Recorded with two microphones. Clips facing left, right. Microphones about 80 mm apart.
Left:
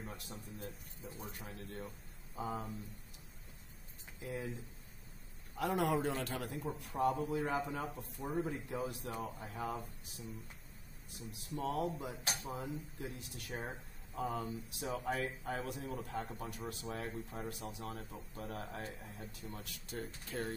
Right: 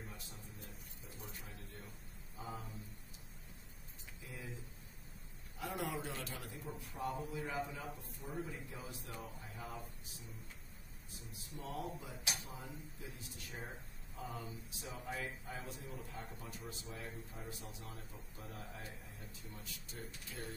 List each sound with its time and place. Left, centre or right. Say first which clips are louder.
0.0 s a man's voice: left 5 dB; left
1.2 s a man's voice: left 4 dB; left
4.2 s speech: left 10 dB; left
5.6 s a man's voice: left 8 dB; left
8.6 s speech: left 9 dB; left
11.5 s a man's voice: left 8 dB; left